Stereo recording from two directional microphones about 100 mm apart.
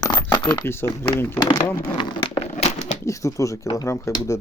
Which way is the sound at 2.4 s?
90° left.